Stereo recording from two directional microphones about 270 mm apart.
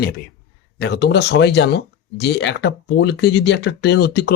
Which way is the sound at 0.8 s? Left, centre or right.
Left.